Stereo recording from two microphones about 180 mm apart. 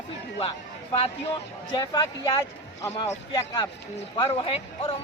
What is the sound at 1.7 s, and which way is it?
Speech, 25° left (ahead or behind).